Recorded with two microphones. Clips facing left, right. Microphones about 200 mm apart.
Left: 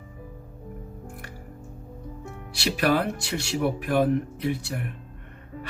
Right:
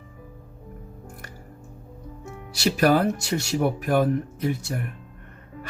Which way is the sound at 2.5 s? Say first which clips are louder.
Right 4 dB; 40° right (ahead or behind).